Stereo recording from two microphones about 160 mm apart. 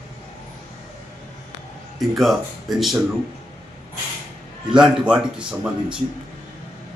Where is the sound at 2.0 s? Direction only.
Centre (ahead or behind).